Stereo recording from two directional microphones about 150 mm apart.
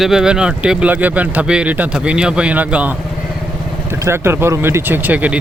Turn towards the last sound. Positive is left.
turn(degrees=-10)  # may be behind; listen again after turning